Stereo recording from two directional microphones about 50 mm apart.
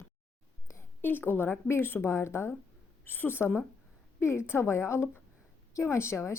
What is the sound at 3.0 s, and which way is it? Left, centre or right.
Speech, left.